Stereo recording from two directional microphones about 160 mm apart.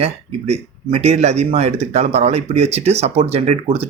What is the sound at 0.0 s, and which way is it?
Speech, 40° right (ahead or behind).